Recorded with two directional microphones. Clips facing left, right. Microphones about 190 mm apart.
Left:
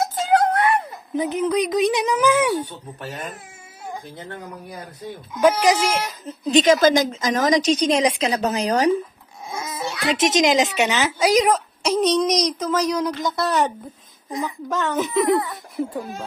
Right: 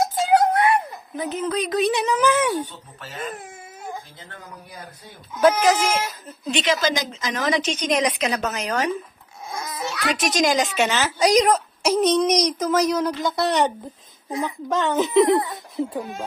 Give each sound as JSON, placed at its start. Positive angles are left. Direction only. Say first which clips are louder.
{"t": 0.0, "sound": "music", "louder": "right 1 dB", "side_deg": -10}
{"t": 1.1, "sound": "speech", "louder": "left 4 dB", "side_deg": 15}
{"t": 5.3, "sound": "speech", "louder": "even", "side_deg": 10}
{"t": 6.5, "sound": "a woman's voice", "louder": "left 7 dB", "side_deg": 45}
{"t": 9.7, "sound": "a child's voice", "louder": "left 2 dB", "side_deg": 25}
{"t": 11.1, "sound": "a child's voice", "louder": "right 1 dB", "side_deg": 5}
{"t": 14.3, "sound": "a woman's voice", "louder": "right 1 dB", "side_deg": -10}